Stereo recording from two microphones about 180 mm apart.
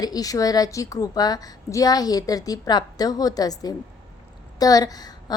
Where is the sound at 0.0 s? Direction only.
20° left (ahead or behind).